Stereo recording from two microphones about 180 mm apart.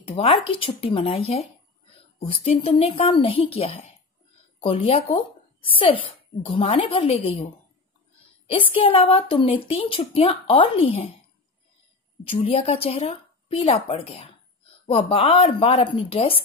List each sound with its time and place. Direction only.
0.1 s a woman's voice: 30° left (ahead or behind)
8.5 s a woman's voice: 30° left (ahead or behind)
12.3 s a woman's voice: 30° left (ahead or behind)